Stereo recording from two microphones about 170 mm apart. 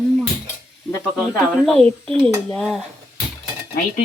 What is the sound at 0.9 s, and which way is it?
Speech, 15° left (ahead or behind).